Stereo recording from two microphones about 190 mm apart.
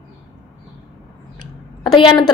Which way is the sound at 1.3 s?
25° left (ahead or behind).